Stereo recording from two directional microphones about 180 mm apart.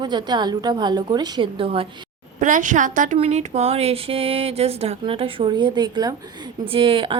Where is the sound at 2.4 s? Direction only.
45° right (ahead or behind).